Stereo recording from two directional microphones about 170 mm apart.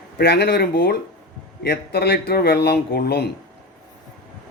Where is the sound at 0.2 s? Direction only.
70° left (ahead or behind).